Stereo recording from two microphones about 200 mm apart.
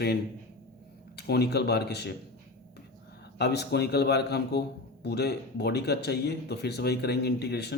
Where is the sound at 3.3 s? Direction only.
55° left (ahead or behind).